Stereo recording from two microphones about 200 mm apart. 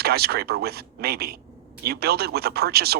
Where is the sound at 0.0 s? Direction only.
50° right (ahead or behind).